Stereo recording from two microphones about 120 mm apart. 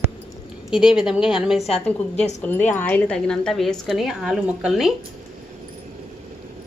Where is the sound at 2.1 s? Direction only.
70° left (ahead or behind).